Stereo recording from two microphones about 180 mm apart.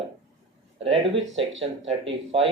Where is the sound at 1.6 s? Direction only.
30° right (ahead or behind).